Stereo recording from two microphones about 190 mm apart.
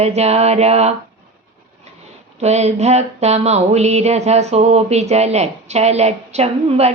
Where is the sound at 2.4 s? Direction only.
35° right (ahead or behind).